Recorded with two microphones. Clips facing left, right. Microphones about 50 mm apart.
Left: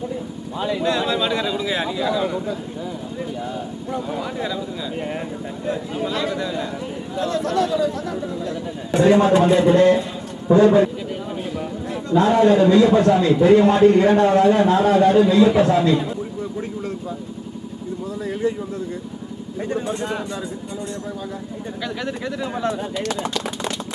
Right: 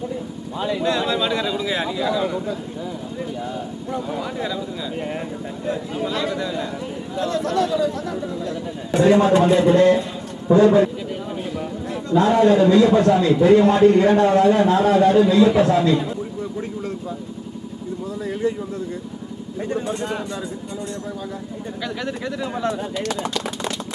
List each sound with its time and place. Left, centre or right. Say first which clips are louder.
0.6 s speech: even; centre
0.8 s a man's voice: even; centre
18.2 s a man's voice: even; centre
19.6 s a man's voice: even; centre
21.8 s a man's voice: even; left